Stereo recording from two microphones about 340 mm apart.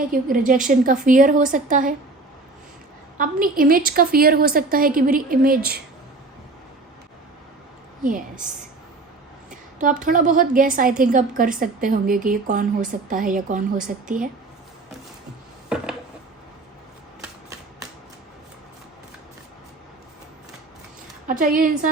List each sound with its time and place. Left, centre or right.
0.1 s a woman's voice: right
3.2 s a woman's voice: right
8.0 s a woman's voice: right
10.0 s a woman's voice: right
21.2 s a woman's voice: right